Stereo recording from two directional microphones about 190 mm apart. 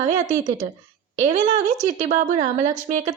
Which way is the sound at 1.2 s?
40° right (ahead or behind).